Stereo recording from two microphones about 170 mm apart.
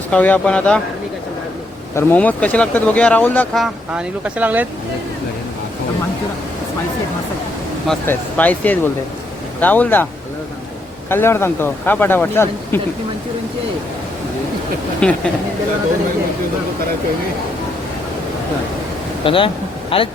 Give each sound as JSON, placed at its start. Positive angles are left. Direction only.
{"t": 0.1, "sound": "speech", "side_deg": 5}
{"t": 2.0, "sound": "speech", "side_deg": 10}
{"t": 8.0, "sound": "speech", "side_deg": 10}
{"t": 11.1, "sound": "speech", "side_deg": 15}
{"t": 15.0, "sound": "speech", "side_deg": 5}
{"t": 19.2, "sound": "speech", "side_deg": 30}